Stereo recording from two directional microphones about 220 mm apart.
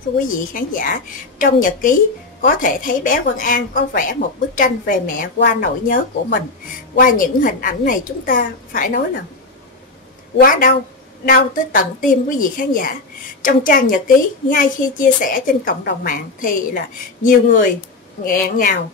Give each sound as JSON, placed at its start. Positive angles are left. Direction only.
{"t": 0.2, "sound": "a woman's voice", "side_deg": 40}
{"t": 7.0, "sound": "a woman's voice", "side_deg": 40}
{"t": 10.4, "sound": "a woman's voice", "side_deg": 40}